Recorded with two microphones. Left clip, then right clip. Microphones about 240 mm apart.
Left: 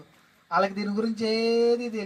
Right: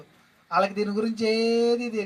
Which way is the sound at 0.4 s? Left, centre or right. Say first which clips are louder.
Right 1 dB; right.